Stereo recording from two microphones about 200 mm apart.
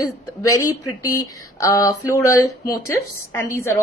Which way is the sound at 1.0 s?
15° left (ahead or behind).